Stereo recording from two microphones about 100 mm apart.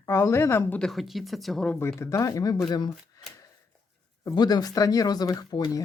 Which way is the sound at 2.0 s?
30° left (ahead or behind).